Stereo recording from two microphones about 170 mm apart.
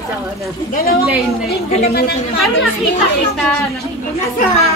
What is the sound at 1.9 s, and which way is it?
Speech, 70° left (ahead or behind).